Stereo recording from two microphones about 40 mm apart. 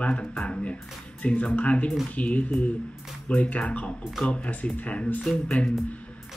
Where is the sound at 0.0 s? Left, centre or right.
Left.